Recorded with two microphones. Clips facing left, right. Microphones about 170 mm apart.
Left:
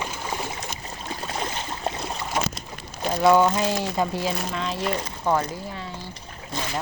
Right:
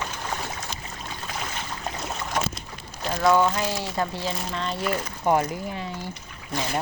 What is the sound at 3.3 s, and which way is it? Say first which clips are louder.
Speech: left 2 dB; 20° left (ahead or behind).